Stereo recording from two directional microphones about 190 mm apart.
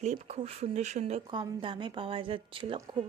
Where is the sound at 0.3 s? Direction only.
35° right (ahead or behind).